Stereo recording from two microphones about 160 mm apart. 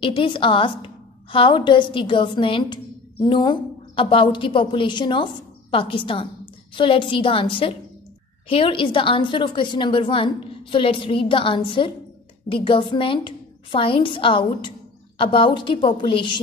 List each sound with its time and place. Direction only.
0.0 s a woman's voice: 30° left (ahead or behind)